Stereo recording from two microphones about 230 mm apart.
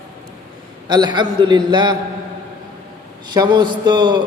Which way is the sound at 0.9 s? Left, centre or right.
Centre.